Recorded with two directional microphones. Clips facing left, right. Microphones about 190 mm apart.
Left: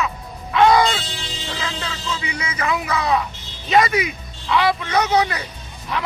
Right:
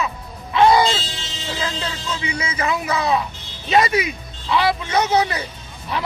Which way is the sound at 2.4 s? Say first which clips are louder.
Even; 25° right (ahead or behind).